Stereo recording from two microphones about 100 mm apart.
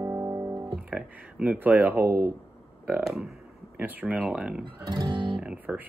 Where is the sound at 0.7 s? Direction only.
10° right (ahead or behind).